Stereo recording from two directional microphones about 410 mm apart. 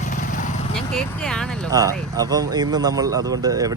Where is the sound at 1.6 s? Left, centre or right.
Centre.